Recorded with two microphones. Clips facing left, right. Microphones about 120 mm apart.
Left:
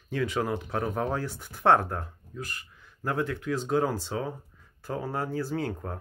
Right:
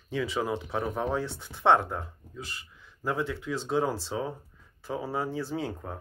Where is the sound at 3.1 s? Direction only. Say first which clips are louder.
Left 2 dB; centre (ahead or behind).